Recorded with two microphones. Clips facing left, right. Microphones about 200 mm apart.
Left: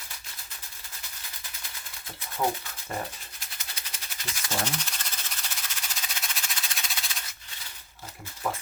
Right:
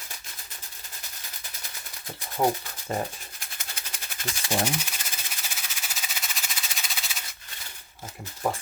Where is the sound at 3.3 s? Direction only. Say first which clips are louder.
Right 2 dB; 50° right (ahead or behind).